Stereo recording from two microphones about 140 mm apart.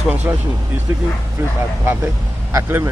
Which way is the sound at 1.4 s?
20° right (ahead or behind).